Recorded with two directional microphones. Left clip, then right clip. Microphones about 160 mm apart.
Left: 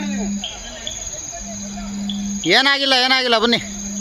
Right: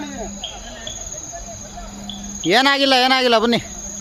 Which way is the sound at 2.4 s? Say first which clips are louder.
Even; 5° right (ahead or behind).